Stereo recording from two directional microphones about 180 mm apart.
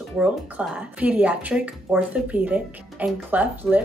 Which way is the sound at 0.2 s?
5° right (ahead or behind).